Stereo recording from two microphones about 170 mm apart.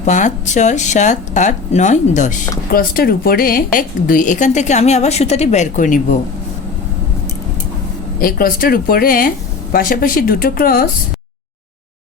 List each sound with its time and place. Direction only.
0.0 s a woman's voice: 45° left (ahead or behind)
2.7 s a woman's voice: 60° left (ahead or behind)
8.2 s a woman's voice: 60° left (ahead or behind)